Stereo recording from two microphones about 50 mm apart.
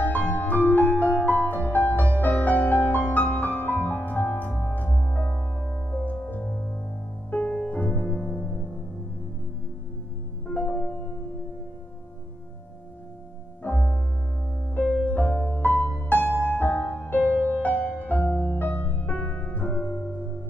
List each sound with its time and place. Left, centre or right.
0.0 s music: left
6.4 s music: centre
7.2 s music: left
10.5 s music: left
13.6 s music: left
15.0 s music: left
19.1 s piano: left
19.7 s music: centre
20.0 s music: left